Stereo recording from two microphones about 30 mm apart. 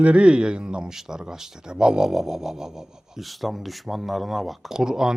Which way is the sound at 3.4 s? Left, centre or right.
Centre.